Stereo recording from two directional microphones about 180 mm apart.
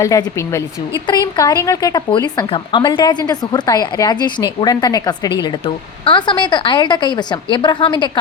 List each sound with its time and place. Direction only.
0.0 s speech: 20° left (ahead or behind)